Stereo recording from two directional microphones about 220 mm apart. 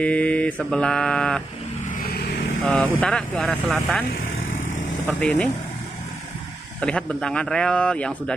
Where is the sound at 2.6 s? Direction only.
5° left (ahead or behind).